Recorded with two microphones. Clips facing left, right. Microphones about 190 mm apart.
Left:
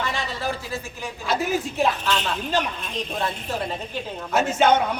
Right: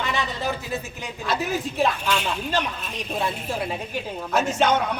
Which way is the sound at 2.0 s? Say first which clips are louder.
Even; 10° right (ahead or behind).